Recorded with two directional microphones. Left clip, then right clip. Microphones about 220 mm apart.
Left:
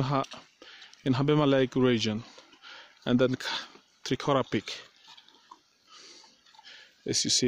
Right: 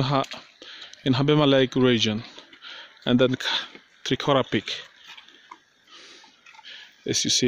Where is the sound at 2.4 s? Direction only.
10° left (ahead or behind).